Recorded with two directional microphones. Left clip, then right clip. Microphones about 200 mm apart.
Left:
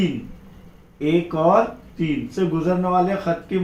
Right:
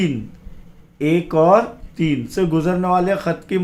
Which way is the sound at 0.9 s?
45° right (ahead or behind).